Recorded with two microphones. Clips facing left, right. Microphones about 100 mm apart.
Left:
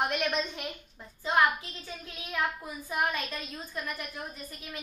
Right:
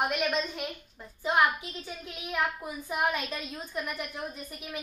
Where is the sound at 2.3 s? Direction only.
15° right (ahead or behind).